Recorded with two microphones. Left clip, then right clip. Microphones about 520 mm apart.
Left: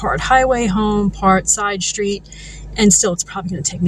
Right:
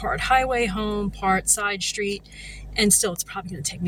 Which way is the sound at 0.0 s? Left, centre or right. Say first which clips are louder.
Left 7 dB; right.